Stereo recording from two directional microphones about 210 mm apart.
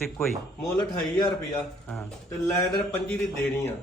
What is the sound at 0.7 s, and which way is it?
Speech, 20° left (ahead or behind).